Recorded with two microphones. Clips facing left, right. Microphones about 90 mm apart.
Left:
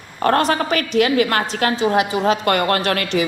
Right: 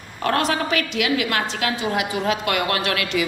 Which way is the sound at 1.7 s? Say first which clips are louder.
Left 8 dB; 30° left (ahead or behind).